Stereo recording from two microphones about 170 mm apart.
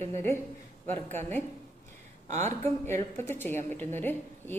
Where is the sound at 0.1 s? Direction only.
15° left (ahead or behind).